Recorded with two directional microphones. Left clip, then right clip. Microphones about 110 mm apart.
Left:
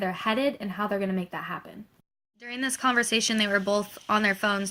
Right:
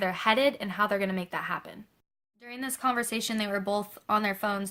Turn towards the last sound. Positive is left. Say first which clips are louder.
# left 5 dB
turn(degrees=-35)  # may be behind; listen again after turning